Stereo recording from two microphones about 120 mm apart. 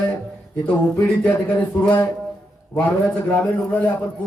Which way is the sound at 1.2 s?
10° left (ahead or behind).